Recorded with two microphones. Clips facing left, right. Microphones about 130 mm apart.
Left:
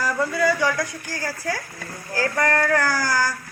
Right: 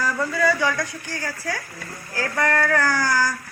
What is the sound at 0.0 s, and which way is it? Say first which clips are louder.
Speech: left 1 dB; 10° left (ahead or behind).